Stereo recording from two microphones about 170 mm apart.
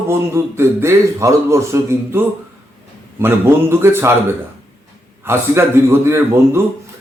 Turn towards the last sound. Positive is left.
turn(degrees=-15)  # may be behind; listen again after turning